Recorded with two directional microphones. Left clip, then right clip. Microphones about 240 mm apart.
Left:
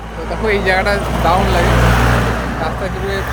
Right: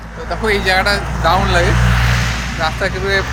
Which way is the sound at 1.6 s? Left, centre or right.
Left.